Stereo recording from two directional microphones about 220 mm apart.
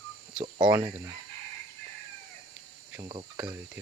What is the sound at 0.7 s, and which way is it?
Speech, 15° right (ahead or behind).